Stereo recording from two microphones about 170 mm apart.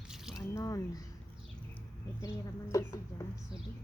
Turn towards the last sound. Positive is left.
turn(degrees=20)  # may be behind; listen again after turning